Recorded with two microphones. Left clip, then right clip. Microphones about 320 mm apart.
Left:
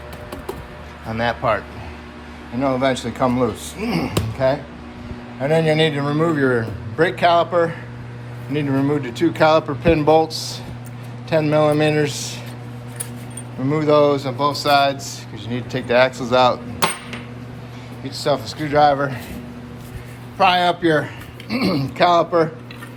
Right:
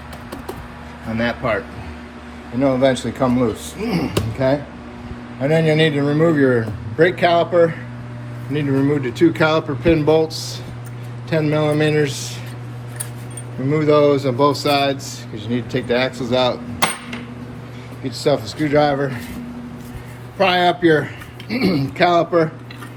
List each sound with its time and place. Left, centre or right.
1.1 s a man's voice: centre
2.6 s a man's voice: centre
4.4 s a man's voice: centre
8.9 s a man's voice: centre
13.7 s a man's voice: centre
18.0 s a man's voice: centre
20.4 s a man's voice: centre